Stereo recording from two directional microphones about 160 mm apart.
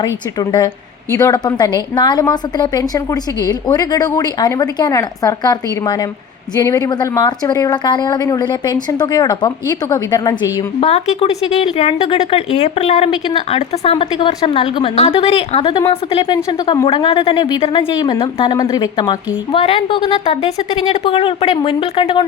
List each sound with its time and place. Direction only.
0.0 s a woman's voice: 25° left (ahead or behind)
10.8 s a woman's voice: 40° left (ahead or behind)